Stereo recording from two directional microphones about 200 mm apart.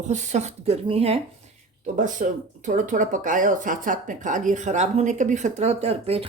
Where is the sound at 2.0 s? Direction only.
40° right (ahead or behind).